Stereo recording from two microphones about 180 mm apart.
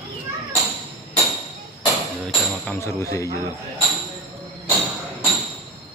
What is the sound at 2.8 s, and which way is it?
Speech, 15° left (ahead or behind).